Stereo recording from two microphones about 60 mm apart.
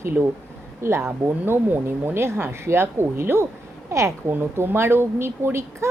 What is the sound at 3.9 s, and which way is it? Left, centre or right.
Speech, right.